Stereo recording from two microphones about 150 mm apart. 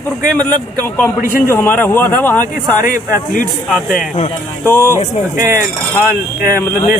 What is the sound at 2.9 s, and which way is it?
Speech, 65° left (ahead or behind).